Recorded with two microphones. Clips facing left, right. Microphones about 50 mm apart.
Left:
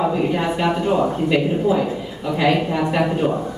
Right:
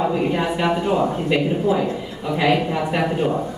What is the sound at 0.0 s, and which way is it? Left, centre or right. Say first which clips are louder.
Speech: left 1 dB; centre.